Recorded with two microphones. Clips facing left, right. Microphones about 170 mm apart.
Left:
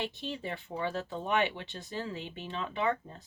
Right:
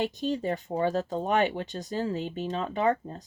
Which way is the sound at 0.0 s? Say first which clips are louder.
Right 8 dB; 40° right (ahead or behind).